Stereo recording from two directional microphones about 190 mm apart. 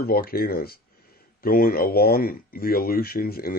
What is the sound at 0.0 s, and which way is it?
Speech, 55° left (ahead or behind).